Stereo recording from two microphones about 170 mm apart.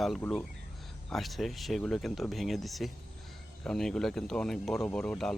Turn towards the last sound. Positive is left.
turn(degrees=5)  # may be behind; listen again after turning